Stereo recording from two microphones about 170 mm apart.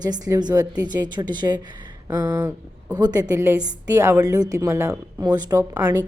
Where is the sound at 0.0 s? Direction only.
20° right (ahead or behind).